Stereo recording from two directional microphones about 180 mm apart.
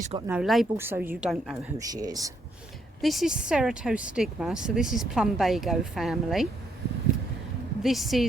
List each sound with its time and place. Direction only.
0.3 s speech: 5° right (ahead or behind)
0.8 s a woman's voice: 10° right (ahead or behind)
1.8 s speech: 20° right (ahead or behind)
3.0 s speech: centre (ahead or behind)
7.8 s speech: centre (ahead or behind)